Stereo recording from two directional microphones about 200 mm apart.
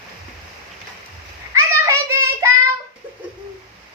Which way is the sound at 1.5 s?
15° right (ahead or behind).